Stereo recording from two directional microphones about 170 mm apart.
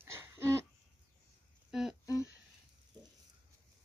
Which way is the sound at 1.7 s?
Centre (ahead or behind).